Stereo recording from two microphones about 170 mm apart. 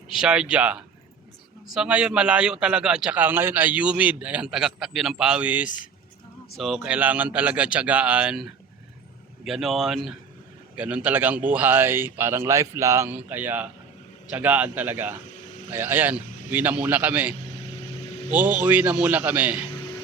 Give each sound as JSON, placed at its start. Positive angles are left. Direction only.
{"t": 0.1, "sound": "a man's voice", "side_deg": -5}
{"t": 5.6, "sound": "speech", "side_deg": 50}
{"t": 6.6, "sound": "a man's voice", "side_deg": 0}